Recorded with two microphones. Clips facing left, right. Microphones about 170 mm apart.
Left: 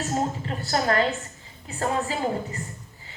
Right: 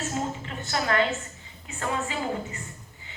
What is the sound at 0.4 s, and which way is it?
A woman's voice, 35° left (ahead or behind).